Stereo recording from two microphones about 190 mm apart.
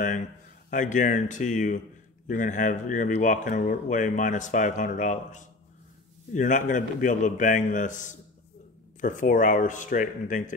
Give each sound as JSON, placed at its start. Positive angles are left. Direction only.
{"t": 0.7, "sound": "speech", "side_deg": 40}